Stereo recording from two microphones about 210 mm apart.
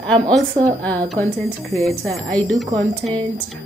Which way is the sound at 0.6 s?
35° right (ahead or behind).